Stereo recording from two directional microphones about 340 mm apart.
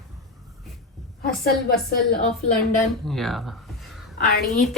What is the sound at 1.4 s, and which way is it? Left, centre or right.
Speech, left.